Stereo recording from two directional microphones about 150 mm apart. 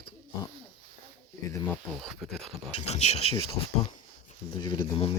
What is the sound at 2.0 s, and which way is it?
Speech, centre (ahead or behind).